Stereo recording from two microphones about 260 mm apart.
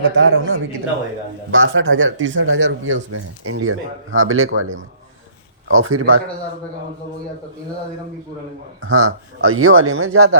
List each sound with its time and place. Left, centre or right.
0.2 s a man's voice: right
8.9 s a man's voice: right